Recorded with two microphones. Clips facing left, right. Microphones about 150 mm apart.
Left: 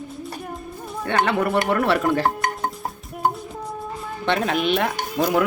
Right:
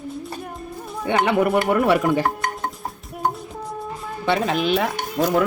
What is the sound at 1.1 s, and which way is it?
Speech, 15° right (ahead or behind).